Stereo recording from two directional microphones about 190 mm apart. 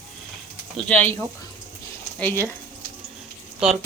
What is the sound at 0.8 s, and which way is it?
Speech, 5° left (ahead or behind).